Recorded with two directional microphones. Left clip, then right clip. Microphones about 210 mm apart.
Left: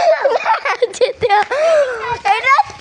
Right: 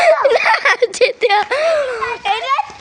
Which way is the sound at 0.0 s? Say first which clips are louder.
Right 2 dB; 30° right (ahead or behind).